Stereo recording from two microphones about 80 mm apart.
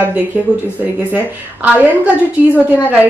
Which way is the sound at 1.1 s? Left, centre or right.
Right.